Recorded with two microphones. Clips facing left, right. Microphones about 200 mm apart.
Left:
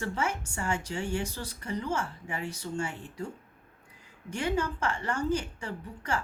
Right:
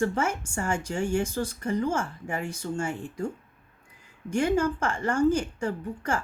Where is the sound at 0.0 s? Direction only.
45° right (ahead or behind).